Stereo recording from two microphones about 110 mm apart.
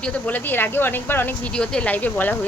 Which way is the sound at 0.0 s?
15° left (ahead or behind).